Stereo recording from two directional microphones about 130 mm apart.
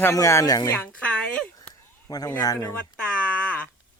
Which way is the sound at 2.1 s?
30° left (ahead or behind).